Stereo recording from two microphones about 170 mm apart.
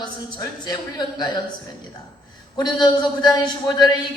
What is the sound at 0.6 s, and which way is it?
Speech, 25° left (ahead or behind).